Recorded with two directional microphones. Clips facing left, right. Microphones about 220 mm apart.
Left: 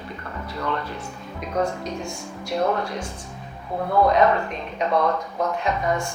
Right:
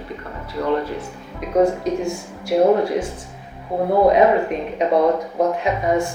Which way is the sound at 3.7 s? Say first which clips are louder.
Right 5 dB; 30° right (ahead or behind).